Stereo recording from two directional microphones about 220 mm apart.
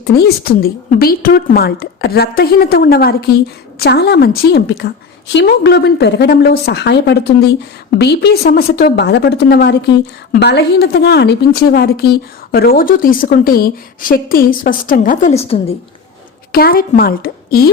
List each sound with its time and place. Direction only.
0.0 s a woman's voice: 45° left (ahead or behind); by 15.5 s 30° left (ahead or behind)
16.5 s a woman's voice: 40° left (ahead or behind)